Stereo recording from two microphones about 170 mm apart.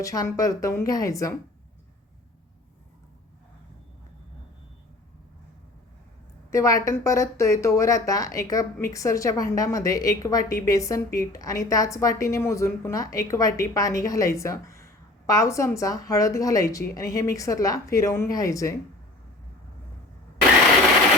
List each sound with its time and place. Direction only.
0.0 s speech: 20° left (ahead or behind)
6.5 s speech: 20° left (ahead or behind)